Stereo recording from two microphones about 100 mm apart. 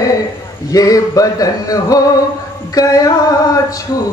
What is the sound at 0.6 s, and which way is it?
A woman's voice, 35° left (ahead or behind).